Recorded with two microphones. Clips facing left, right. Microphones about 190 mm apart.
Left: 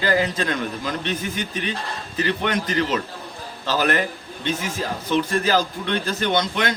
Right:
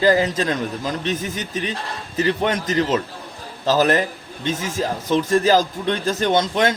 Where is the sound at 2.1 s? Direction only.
35° right (ahead or behind).